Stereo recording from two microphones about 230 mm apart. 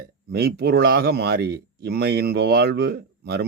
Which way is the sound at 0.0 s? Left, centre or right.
Right.